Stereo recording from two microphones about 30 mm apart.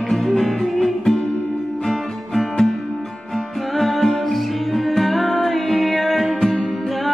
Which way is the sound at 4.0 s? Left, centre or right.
Centre.